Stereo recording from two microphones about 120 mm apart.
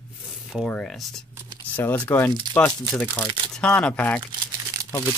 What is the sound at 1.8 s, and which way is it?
Speech, 15° left (ahead or behind).